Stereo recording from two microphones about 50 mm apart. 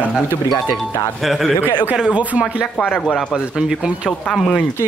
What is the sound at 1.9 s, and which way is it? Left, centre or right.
Speech, centre.